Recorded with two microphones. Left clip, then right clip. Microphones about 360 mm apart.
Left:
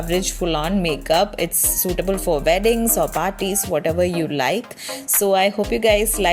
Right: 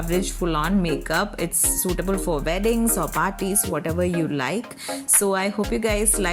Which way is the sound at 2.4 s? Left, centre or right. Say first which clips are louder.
Left 6 dB; centre.